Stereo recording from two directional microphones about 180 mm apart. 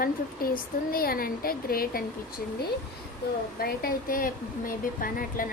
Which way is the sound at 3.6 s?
55° left (ahead or behind).